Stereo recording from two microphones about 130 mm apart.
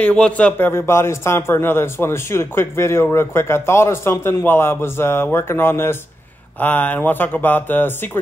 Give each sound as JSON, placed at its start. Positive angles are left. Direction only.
{"t": 0.0, "sound": "a man's voice", "side_deg": 10}